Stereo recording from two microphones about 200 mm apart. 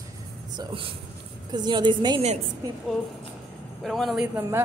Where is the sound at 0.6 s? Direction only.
25° right (ahead or behind).